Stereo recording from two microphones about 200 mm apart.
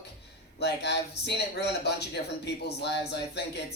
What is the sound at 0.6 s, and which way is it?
Speech, 55° left (ahead or behind).